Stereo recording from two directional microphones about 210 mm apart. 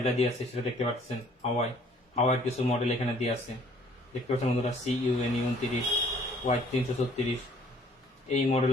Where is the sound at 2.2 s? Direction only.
30° left (ahead or behind).